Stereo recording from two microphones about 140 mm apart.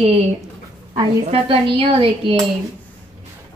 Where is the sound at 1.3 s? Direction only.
40° right (ahead or behind).